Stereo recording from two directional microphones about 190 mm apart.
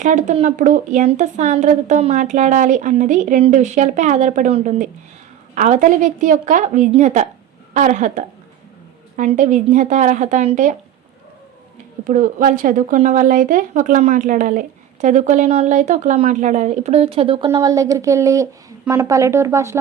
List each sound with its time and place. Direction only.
0.0 s a woman's voice: 40° right (ahead or behind)
12.0 s a woman's voice: 45° right (ahead or behind); by 17.5 s 30° right (ahead or behind)
17.5 s speech: 20° right (ahead or behind)